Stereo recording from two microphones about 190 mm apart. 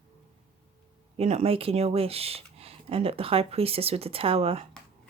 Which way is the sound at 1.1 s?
35° right (ahead or behind).